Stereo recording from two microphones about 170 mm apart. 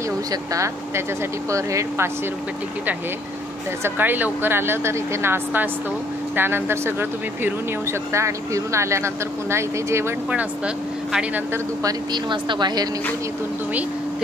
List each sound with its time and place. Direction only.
0.3 s speech: 20° right (ahead or behind)
3.8 s speech: 10° right (ahead or behind)
12.1 s speech: 25° right (ahead or behind)